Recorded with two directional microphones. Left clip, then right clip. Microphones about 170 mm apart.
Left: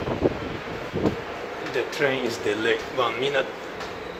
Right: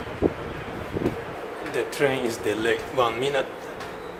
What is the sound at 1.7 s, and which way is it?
Speech, 20° right (ahead or behind).